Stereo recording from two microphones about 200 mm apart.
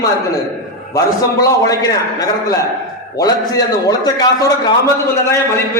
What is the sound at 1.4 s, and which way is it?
Speech, 20° left (ahead or behind).